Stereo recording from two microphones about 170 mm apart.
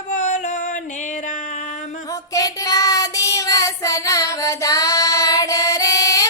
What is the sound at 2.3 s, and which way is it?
Child singing, 20° left (ahead or behind).